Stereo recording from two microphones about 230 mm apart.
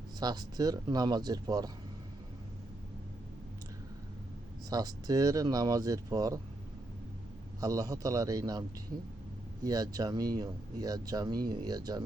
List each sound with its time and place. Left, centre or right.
0.2 s speech: centre
4.7 s speech: centre
7.6 s speech: centre
9.6 s speech: centre